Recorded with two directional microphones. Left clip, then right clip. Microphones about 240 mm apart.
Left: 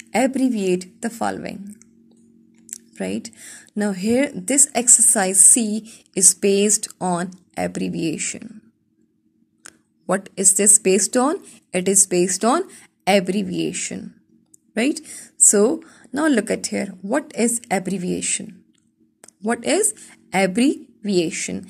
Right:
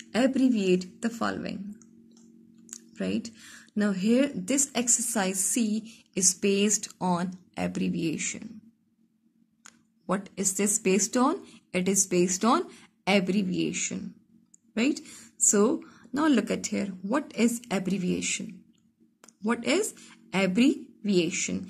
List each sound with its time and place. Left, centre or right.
0.1 s speech: left
9.6 s a woman's voice: left